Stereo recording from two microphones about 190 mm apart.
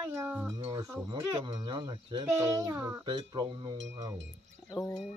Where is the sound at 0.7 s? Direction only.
15° right (ahead or behind).